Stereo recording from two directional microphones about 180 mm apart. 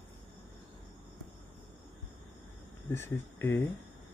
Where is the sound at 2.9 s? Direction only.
15° left (ahead or behind).